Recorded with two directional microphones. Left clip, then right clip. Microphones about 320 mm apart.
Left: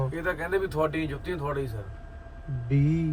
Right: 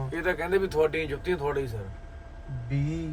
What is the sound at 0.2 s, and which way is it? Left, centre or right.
Speech, centre.